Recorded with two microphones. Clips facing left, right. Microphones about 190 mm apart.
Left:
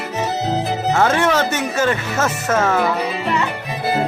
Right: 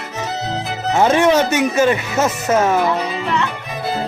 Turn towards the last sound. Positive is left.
turn(degrees=5)  # may be behind; listen again after turning